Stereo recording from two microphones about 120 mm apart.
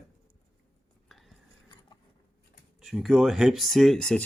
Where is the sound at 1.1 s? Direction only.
Centre (ahead or behind).